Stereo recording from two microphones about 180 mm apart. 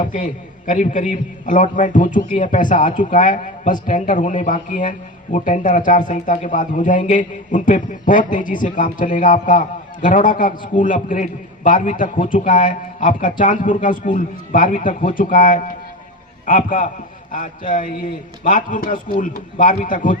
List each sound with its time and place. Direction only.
0.0 s speech: 45° left (ahead or behind)